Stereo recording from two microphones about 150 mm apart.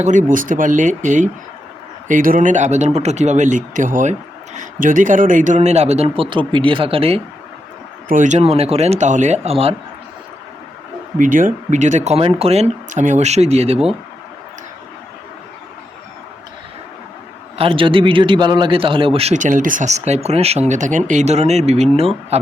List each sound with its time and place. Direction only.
0.0 s a man's voice: 55° right (ahead or behind); by 7.2 s 40° right (ahead or behind)
8.0 s a man's voice: 60° right (ahead or behind); by 9.7 s 40° right (ahead or behind)
11.2 s a man's voice: 60° right (ahead or behind); by 13.7 s 45° right (ahead or behind)
17.6 s a man's voice: 35° right (ahead or behind)